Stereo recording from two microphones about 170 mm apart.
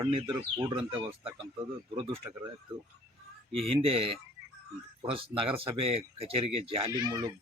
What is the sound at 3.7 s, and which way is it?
Speech, 35° right (ahead or behind).